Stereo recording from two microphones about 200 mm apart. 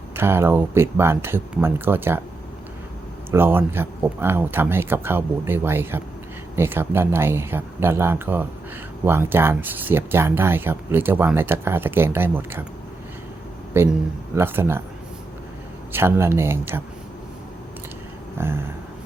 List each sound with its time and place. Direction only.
0.2 s speech: 10° right (ahead or behind)
3.3 s speech: 10° right (ahead or behind)
13.7 s speech: 10° right (ahead or behind)
15.9 s speech: 10° right (ahead or behind)
18.3 s speech: 10° right (ahead or behind)